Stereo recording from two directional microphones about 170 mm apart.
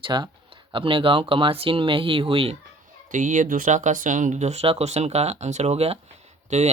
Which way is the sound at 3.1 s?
50° right (ahead or behind).